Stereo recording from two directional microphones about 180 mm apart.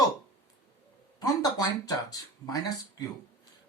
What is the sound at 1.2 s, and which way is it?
Speech, 20° left (ahead or behind).